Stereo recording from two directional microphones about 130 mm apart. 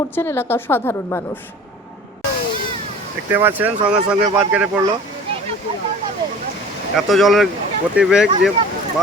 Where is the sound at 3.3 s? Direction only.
15° right (ahead or behind).